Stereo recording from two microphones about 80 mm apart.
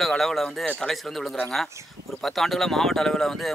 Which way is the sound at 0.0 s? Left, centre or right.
Centre.